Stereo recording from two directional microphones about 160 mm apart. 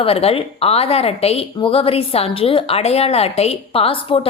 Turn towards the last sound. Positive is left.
turn(degrees=35)  # may be behind; listen again after turning